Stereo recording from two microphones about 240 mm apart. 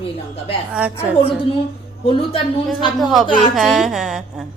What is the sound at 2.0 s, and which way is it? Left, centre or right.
Speech, left.